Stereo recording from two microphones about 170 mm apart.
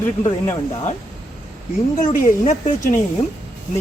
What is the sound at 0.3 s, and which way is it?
Speech, 15° left (ahead or behind).